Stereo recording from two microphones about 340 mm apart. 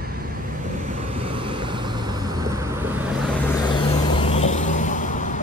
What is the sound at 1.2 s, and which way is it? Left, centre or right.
Vehicle, centre.